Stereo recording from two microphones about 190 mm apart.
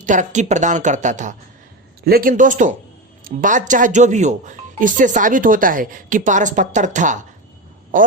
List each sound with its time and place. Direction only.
0.0 s speech: 40° right (ahead or behind)
2.0 s speech: 50° right (ahead or behind)